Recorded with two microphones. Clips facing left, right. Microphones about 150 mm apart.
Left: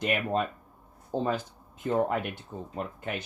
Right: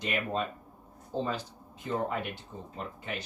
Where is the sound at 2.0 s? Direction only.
50° left (ahead or behind).